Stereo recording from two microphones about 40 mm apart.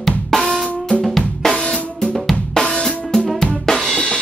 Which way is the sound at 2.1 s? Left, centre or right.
Centre.